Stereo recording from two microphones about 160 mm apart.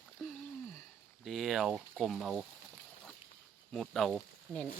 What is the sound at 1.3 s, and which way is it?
Speech, centre (ahead or behind).